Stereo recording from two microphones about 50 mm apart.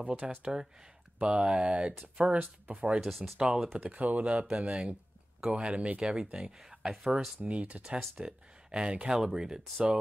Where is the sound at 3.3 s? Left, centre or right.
Centre.